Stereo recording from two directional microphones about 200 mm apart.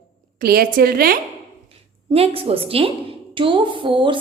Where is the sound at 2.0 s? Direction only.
30° right (ahead or behind).